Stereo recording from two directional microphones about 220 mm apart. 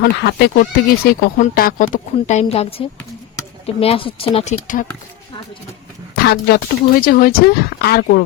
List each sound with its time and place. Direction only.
0.0 s speech: 45° left (ahead or behind)
6.1 s speech: 45° left (ahead or behind)